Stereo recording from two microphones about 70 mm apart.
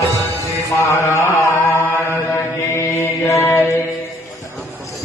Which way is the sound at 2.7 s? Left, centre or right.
Left.